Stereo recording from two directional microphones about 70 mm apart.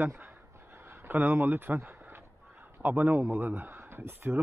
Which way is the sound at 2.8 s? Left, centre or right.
Right.